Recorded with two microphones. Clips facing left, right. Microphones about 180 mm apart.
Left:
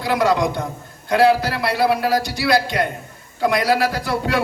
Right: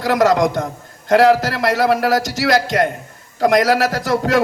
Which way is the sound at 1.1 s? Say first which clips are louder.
Right 3 dB; 90° right.